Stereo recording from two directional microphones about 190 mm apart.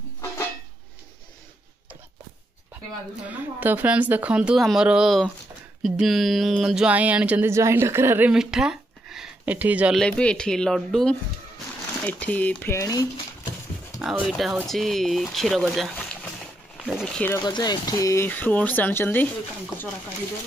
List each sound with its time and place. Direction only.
3.3 s speech: 10° right (ahead or behind)
10.0 s speech: 5° left (ahead or behind)
14.0 s speech: centre (ahead or behind)
17.4 s speech: 20° left (ahead or behind)